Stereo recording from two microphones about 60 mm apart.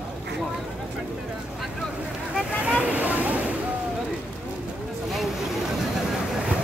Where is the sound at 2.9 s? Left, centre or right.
Right.